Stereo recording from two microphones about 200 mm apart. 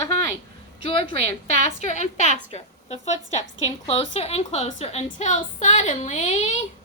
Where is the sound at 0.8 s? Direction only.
30° left (ahead or behind).